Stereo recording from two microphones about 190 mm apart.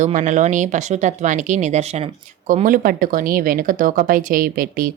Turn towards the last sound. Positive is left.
turn(degrees=-50)  # may be behind; listen again after turning